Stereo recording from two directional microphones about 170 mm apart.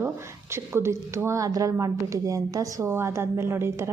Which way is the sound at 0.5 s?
15° right (ahead or behind).